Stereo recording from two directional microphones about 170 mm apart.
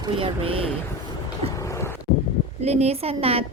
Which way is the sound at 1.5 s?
20° left (ahead or behind).